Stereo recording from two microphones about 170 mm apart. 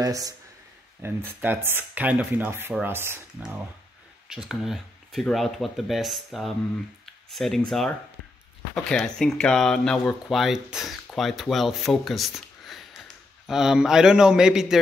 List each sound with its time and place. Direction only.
0.0 s speech: 20° right (ahead or behind); by 6.5 s centre (ahead or behind)
7.1 s a sound: centre (ahead or behind)
8.7 s speech: 5° left (ahead or behind)